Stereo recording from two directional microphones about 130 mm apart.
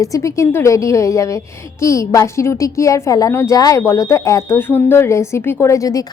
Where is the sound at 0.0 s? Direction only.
25° left (ahead or behind).